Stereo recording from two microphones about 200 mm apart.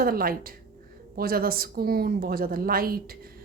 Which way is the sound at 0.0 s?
45° right (ahead or behind).